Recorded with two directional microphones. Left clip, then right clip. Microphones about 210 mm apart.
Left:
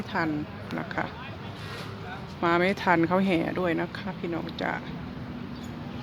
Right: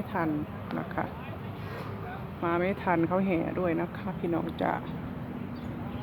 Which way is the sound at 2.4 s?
20° left (ahead or behind).